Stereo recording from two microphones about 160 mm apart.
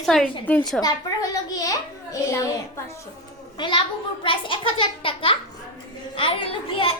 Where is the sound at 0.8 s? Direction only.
25° left (ahead or behind).